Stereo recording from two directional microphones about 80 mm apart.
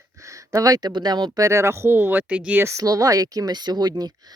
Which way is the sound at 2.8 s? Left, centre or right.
Right.